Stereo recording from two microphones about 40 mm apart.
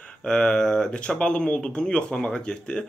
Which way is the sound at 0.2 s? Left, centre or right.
Centre.